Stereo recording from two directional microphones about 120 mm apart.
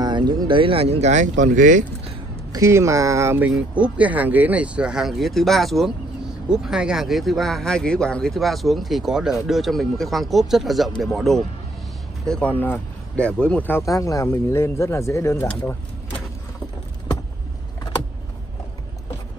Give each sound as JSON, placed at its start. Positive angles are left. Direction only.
{"t": 0.0, "sound": "speech", "side_deg": -40}
{"t": 2.5, "sound": "speech", "side_deg": -25}
{"t": 3.4, "sound": "speech", "side_deg": -10}
{"t": 13.8, "sound": "speech", "side_deg": 30}